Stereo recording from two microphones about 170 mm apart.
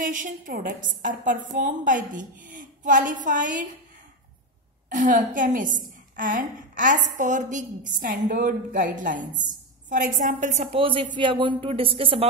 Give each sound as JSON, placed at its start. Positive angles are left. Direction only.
{"t": 0.0, "sound": "a woman's voice", "side_deg": -50}
{"t": 4.8, "sound": "a woman's voice", "side_deg": -50}
{"t": 10.8, "sound": "speech", "side_deg": -30}